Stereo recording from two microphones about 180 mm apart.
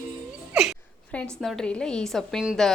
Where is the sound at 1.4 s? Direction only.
Centre (ahead or behind).